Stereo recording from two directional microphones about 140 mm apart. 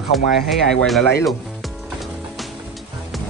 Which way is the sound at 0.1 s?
Centre (ahead or behind).